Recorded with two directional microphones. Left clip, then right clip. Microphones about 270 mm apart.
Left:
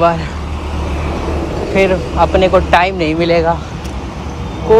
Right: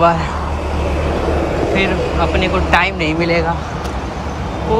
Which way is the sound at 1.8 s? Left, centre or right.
Centre.